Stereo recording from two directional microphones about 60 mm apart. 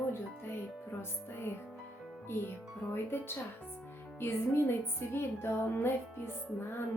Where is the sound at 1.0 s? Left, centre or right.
Left.